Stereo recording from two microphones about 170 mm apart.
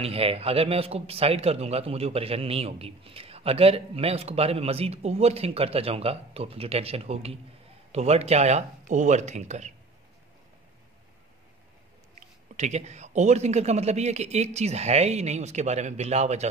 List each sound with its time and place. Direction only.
0.0 s a man's voice: 35° right (ahead or behind)
12.2 s a man's voice: 40° right (ahead or behind)